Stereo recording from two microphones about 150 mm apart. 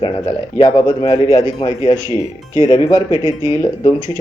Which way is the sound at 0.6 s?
35° left (ahead or behind).